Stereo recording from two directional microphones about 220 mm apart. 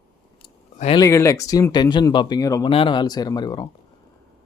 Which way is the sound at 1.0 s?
15° left (ahead or behind).